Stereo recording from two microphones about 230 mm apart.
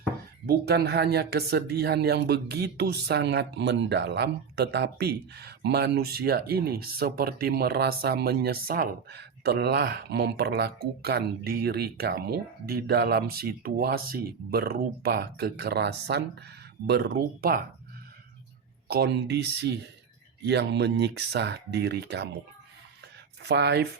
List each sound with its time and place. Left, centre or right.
0.4 s speech: right
18.9 s speech: right
23.4 s speech: right